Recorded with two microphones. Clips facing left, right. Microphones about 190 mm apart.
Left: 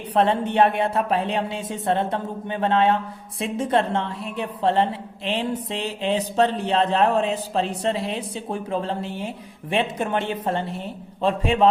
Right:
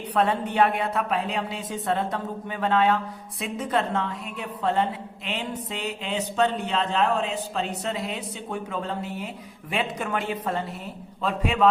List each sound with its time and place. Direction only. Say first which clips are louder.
0.1 s a woman's voice: left 4 dB; 25° left (ahead or behind)
6.7 s a man's voice: left 6 dB; 50° left (ahead or behind)
7.7 s a woman's voice: left 5 dB; 30° left (ahead or behind)